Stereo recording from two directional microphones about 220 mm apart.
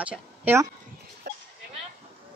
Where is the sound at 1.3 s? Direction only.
45° right (ahead or behind).